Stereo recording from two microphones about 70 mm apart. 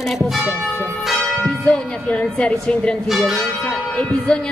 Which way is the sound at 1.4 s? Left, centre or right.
Centre.